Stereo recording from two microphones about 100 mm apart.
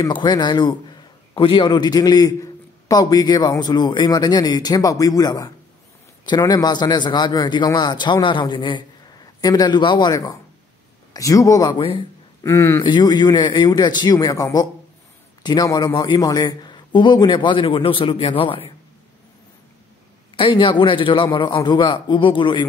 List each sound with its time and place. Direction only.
0.1 s a man's voice: 45° left (ahead or behind)
11.1 s a man's voice: 35° left (ahead or behind)
12.8 s a man's voice: 50° left (ahead or behind)
20.3 s a man's voice: 60° left (ahead or behind)